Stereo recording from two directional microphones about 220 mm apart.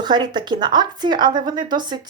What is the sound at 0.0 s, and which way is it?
Speech, 20° right (ahead or behind).